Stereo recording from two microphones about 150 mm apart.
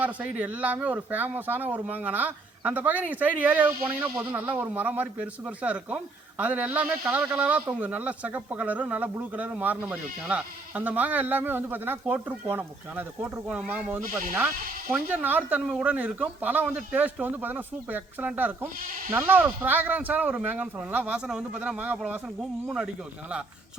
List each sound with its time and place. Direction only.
0.0 s speech: 10° right (ahead or behind)